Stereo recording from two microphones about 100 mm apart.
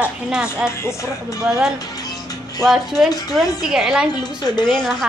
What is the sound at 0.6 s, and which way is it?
Speech, 25° left (ahead or behind).